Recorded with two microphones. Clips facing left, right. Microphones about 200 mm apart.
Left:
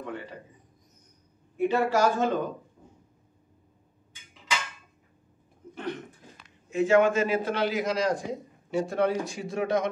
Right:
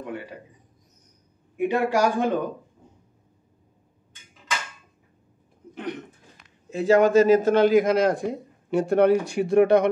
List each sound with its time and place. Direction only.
0.0 s a sound: 10° right (ahead or behind)
1.6 s a man's voice: 15° right (ahead or behind)
6.7 s a man's voice: 35° right (ahead or behind); by 9.8 s 65° right (ahead or behind)